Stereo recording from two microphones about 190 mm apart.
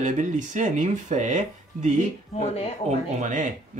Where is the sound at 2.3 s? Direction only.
35° left (ahead or behind).